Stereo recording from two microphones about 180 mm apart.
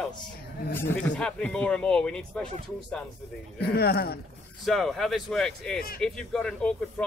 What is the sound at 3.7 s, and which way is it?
Speech, 60° left (ahead or behind).